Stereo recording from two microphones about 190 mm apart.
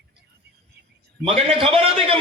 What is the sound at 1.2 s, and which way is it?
Speech, 30° right (ahead or behind).